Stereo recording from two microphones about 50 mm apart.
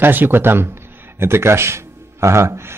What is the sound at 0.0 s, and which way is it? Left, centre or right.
Speech, right.